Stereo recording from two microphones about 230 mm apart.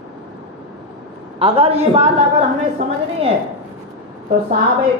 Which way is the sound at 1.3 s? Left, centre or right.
Right.